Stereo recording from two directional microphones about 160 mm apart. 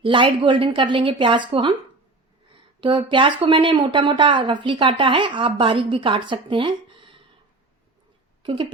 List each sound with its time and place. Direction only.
0.0 s speech: 30° right (ahead or behind)
2.8 s speech: 30° right (ahead or behind)